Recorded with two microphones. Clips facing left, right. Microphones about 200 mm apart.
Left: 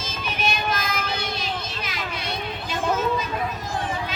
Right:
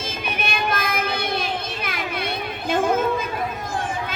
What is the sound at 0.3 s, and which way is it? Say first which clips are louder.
Child singing: even; 55° right (ahead or behind).